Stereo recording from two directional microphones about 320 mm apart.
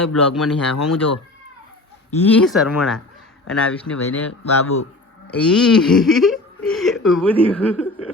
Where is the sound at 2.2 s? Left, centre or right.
Centre.